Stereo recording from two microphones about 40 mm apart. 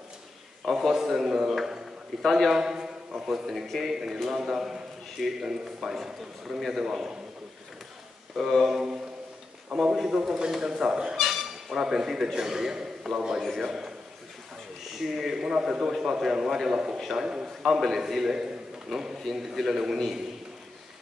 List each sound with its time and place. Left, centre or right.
0.7 s a man's voice: centre
2.5 s a man's voice: centre
3.4 s a man's voice: centre
3.8 s a man's voice: centre
8.5 s a man's voice: centre
11.1 s a sound: centre
11.7 s a man's voice: centre
17.2 s a man's voice: right
17.6 s a man's voice: centre